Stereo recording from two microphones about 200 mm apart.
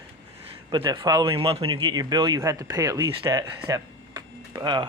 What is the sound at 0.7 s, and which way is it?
Speech, 20° right (ahead or behind).